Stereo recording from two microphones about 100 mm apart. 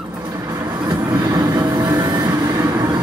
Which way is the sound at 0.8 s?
45° right (ahead or behind).